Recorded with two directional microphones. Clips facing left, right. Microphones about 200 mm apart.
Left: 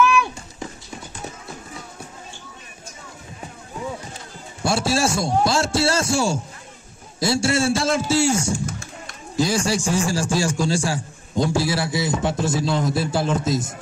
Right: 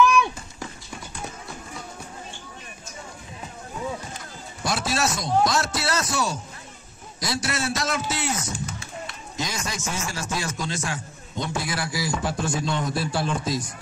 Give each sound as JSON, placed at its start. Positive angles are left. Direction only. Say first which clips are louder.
{"t": 4.6, "sound": "a man's voice", "louder": "left 5 dB", "side_deg": 30}
{"t": 8.6, "sound": "a sound", "louder": "left 2 dB", "side_deg": 45}
{"t": 9.4, "sound": "a man's voice", "louder": "left 10 dB", "side_deg": 30}